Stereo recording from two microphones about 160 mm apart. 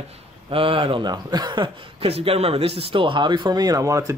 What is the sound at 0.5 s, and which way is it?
Speech, 35° right (ahead or behind).